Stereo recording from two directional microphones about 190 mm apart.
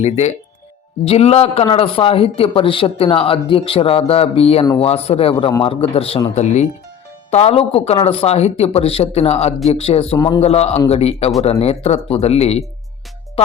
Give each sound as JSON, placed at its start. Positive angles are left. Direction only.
{"t": 0.0, "sound": "a man's voice", "side_deg": 35}
{"t": 10.2, "sound": "a man's voice", "side_deg": 20}
{"t": 10.4, "sound": "speech", "side_deg": 35}